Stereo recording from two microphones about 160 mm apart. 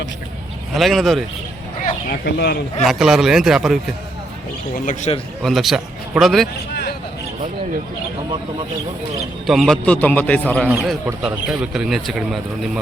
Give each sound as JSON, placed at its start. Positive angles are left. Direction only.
{"t": 0.7, "sound": "speech", "side_deg": 0}
{"t": 1.8, "sound": "speech", "side_deg": 75}
{"t": 2.8, "sound": "speech", "side_deg": 0}
{"t": 5.1, "sound": "a man's voice", "side_deg": 35}
{"t": 5.4, "sound": "a man's voice", "side_deg": 0}
{"t": 9.5, "sound": "a man's voice", "side_deg": 0}
{"t": 11.2, "sound": "speech", "side_deg": -5}